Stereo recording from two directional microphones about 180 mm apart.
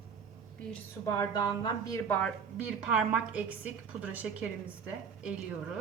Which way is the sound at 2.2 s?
5° right (ahead or behind).